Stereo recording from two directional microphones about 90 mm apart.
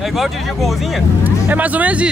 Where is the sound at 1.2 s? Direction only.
15° right (ahead or behind).